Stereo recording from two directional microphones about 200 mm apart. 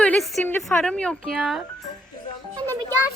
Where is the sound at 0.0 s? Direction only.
5° left (ahead or behind).